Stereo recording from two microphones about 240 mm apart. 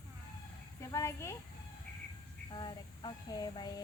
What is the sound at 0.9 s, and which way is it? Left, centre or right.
Speech, centre.